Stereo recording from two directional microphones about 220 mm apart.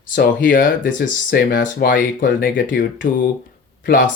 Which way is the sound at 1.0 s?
50° left (ahead or behind).